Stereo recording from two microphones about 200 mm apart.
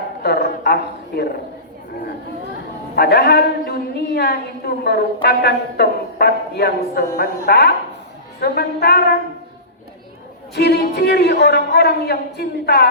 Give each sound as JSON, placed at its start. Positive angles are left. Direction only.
{"t": 0.2, "sound": "a woman's voice", "side_deg": 55}
{"t": 2.9, "sound": "a woman's voice", "side_deg": 55}
{"t": 8.4, "sound": "brass instrument", "side_deg": 55}
{"t": 10.5, "sound": "a woman's voice", "side_deg": 55}